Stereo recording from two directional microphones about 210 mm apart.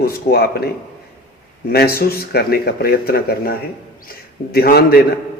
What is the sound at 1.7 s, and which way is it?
Speech, 50° left (ahead or behind).